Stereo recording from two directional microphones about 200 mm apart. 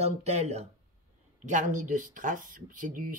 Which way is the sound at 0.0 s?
35° right (ahead or behind).